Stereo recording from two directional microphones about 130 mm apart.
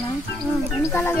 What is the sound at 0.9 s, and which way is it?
Speech, 15° left (ahead or behind).